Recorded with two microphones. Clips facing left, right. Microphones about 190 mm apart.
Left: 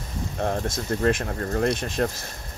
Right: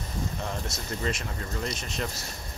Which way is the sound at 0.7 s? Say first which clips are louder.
Left 10 dB; 75° left (ahead or behind).